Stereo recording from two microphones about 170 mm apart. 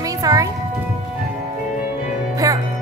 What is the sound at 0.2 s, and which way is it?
Music, 20° right (ahead or behind).